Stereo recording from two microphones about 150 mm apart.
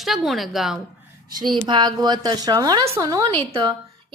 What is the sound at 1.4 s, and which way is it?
A woman's voice, 30° right (ahead or behind).